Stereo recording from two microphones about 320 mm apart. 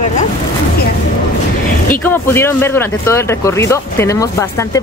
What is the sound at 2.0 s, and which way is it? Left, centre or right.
Speech, centre.